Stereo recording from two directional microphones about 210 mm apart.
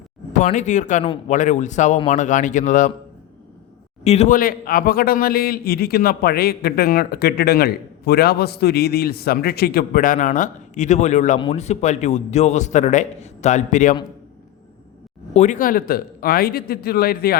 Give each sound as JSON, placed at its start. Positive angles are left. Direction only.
{"t": 0.3, "sound": "a man's voice", "side_deg": 35}
{"t": 4.0, "sound": "a man's voice", "side_deg": 30}
{"t": 15.3, "sound": "a man's voice", "side_deg": 35}